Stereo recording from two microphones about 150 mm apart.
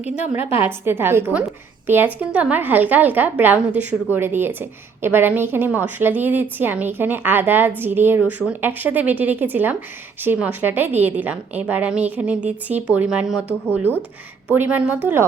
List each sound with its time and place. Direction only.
0.0 s a woman's voice: 40° left (ahead or behind)
0.6 s a woman's voice: 15° right (ahead or behind)
14.4 s a woman's voice: 10° right (ahead or behind)